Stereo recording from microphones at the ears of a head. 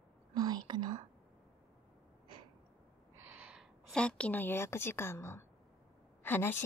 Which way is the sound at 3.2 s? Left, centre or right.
Right.